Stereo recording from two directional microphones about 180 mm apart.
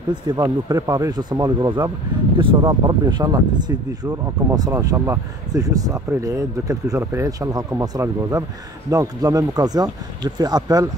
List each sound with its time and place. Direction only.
0.1 s speech: 25° right (ahead or behind)